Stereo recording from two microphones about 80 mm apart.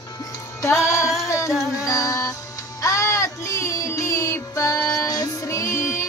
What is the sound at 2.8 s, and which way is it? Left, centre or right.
Child singing, left.